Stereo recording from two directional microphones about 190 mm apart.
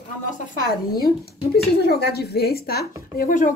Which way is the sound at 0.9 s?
55° left (ahead or behind).